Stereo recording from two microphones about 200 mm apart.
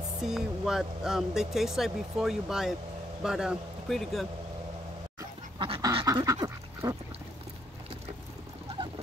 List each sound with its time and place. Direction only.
0.2 s speech: centre (ahead or behind)
5.6 s duck: 20° right (ahead or behind)